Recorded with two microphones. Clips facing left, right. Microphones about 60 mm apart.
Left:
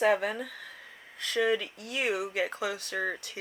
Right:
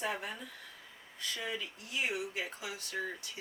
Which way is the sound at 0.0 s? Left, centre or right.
Left.